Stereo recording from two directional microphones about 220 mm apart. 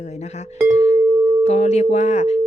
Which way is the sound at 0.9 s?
10° right (ahead or behind).